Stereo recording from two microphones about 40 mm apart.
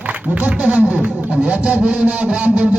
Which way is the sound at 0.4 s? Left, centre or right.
Right.